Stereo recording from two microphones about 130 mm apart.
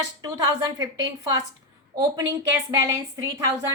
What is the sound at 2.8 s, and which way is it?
Speech, 25° right (ahead or behind).